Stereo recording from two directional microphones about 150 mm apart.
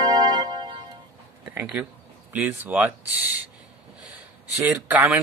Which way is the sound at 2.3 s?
10° right (ahead or behind).